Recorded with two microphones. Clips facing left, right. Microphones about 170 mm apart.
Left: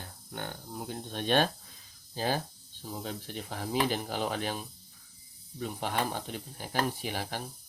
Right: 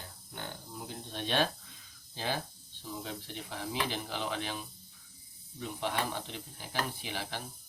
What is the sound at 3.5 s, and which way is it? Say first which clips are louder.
Speech: left 6 dB; 45° left (ahead or behind).